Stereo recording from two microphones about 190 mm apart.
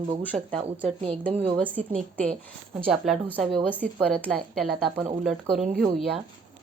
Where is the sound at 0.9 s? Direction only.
30° right (ahead or behind).